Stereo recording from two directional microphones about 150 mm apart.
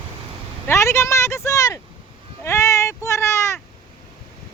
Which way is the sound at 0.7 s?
20° left (ahead or behind).